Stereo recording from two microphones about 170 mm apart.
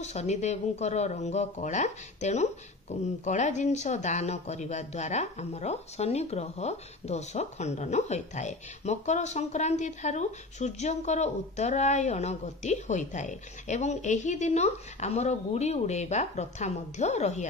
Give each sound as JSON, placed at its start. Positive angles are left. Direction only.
{"t": 0.0, "sound": "speech", "side_deg": 40}